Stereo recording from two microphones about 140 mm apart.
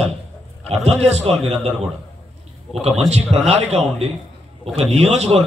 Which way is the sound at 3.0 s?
50° right (ahead or behind).